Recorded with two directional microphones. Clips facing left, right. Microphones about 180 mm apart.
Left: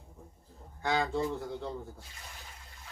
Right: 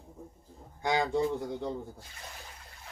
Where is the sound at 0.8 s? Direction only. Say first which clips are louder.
Right 2 dB; 15° right (ahead or behind).